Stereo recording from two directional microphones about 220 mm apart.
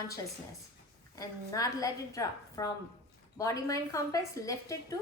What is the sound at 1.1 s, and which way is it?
A woman's voice, 15° left (ahead or behind).